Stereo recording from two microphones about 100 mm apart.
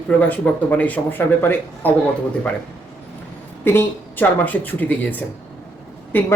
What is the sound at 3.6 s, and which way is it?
Speech, 20° left (ahead or behind).